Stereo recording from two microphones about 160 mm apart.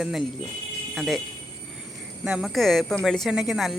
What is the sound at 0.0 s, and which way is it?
Speech, centre (ahead or behind).